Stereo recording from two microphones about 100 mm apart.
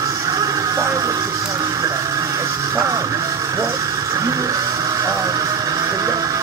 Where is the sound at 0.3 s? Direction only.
35° right (ahead or behind).